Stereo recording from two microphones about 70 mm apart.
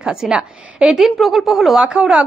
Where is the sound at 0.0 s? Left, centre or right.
Centre.